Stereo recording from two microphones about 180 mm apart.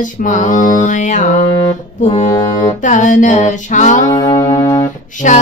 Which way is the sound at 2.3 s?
20° left (ahead or behind).